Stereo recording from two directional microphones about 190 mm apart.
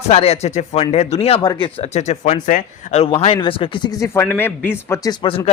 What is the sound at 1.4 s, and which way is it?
A man's voice, 20° left (ahead or behind).